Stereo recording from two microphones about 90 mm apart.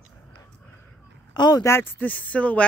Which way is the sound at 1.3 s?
50° left (ahead or behind).